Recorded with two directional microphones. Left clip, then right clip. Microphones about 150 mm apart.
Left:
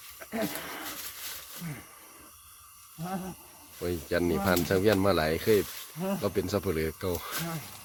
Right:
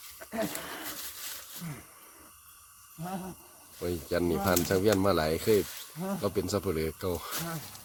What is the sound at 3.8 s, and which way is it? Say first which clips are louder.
Speech: left 1 dB; 10° right (ahead or behind).